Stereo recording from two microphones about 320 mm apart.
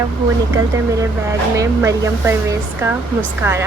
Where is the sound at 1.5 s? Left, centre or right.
Centre.